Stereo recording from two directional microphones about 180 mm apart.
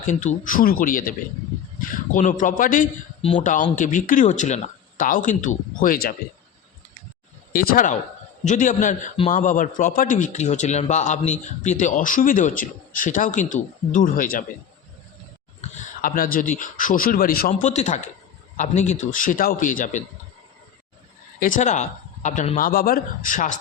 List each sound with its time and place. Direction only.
0.0 s a man's voice: 45° left (ahead or behind)
3.2 s speech: 30° left (ahead or behind)
3.4 s a man's voice: 45° left (ahead or behind)
7.5 s a man's voice: 55° left (ahead or behind)
16.0 s a man's voice: 50° left (ahead or behind)
21.3 s a man's voice: 50° left (ahead or behind)